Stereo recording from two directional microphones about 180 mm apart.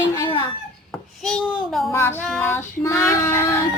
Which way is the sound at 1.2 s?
5° left (ahead or behind).